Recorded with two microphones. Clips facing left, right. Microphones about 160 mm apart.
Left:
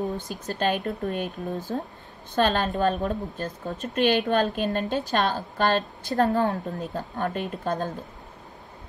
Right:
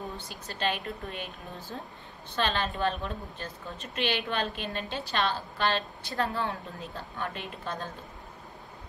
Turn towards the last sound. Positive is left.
turn(degrees=45)  # may be behind; listen again after turning